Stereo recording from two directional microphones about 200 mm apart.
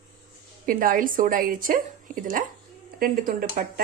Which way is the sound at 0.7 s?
45° right (ahead or behind).